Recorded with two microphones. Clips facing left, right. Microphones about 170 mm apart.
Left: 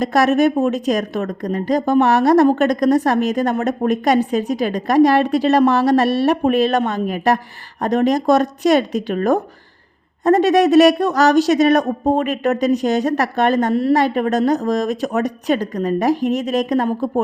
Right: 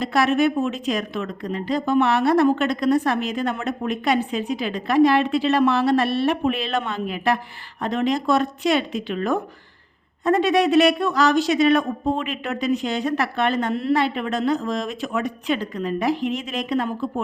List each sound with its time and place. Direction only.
0.0 s a woman's voice: 45° left (ahead or behind)